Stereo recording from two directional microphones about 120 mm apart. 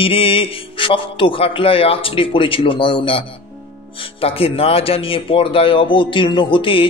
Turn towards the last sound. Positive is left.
turn(degrees=45)  # may be behind; listen again after turning